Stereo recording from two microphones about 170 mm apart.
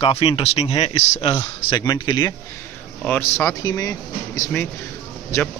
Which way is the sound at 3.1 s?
15° left (ahead or behind).